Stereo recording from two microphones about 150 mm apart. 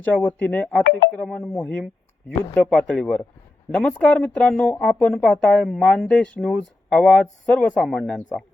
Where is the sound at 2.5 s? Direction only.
10° left (ahead or behind).